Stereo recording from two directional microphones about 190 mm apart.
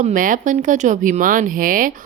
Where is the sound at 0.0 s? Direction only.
45° right (ahead or behind).